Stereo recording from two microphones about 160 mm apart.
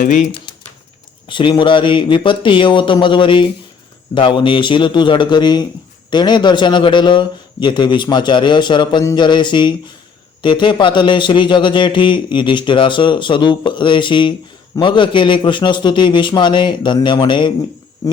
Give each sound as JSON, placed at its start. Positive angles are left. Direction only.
{"t": 0.0, "sound": "speech", "side_deg": 50}
{"t": 1.3, "sound": "a man's voice", "side_deg": 30}